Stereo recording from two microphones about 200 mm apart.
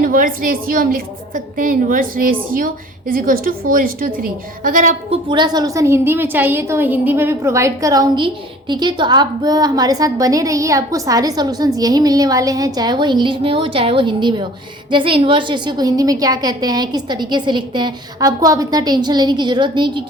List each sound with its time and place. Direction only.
0.0 s a woman's voice: 45° right (ahead or behind)
5.3 s a woman's voice: 20° right (ahead or behind)